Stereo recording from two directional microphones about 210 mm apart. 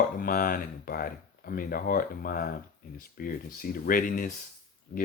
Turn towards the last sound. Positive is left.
turn(degrees=50)  # may be behind; listen again after turning